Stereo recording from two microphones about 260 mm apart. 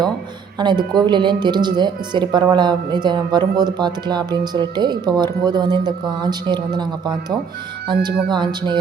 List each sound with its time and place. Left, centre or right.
0.6 s speech: centre